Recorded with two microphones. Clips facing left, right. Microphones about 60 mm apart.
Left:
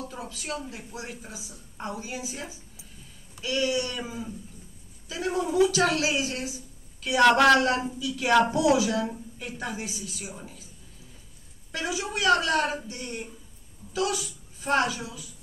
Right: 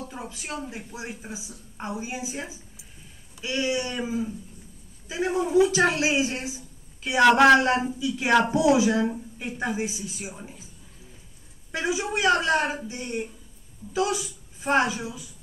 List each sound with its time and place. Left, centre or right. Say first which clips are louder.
0.1 s a man's voice: even; right
11.7 s a woman's voice: right 4 dB; right